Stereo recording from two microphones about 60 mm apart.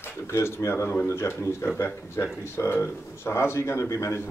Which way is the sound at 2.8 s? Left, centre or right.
Left.